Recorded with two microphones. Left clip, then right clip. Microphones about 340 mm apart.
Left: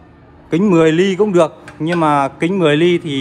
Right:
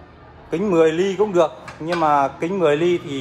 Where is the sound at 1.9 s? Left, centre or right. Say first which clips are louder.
Left 3 dB; left.